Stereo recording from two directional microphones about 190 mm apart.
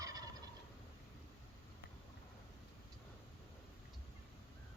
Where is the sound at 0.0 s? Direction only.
20° right (ahead or behind).